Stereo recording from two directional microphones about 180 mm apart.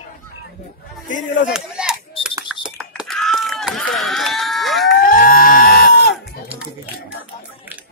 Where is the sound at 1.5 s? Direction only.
5° right (ahead or behind).